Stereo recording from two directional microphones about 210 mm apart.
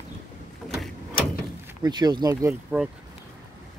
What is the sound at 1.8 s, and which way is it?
Speech, 20° right (ahead or behind).